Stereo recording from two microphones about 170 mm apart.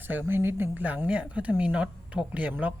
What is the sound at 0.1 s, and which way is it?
Speech, 10° right (ahead or behind).